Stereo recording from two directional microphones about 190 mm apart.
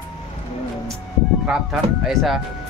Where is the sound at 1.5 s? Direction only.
Centre (ahead or behind).